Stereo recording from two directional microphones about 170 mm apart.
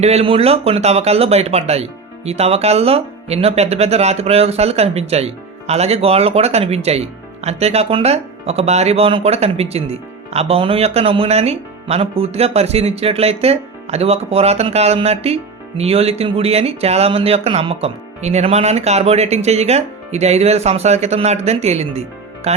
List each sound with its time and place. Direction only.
0.0 s speech: 35° right (ahead or behind)
22.5 s music: 40° right (ahead or behind)